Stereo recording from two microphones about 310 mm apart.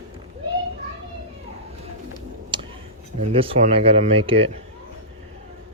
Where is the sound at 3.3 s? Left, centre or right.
Centre.